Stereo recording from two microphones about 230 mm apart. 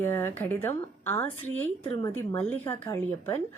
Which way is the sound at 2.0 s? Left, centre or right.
Left.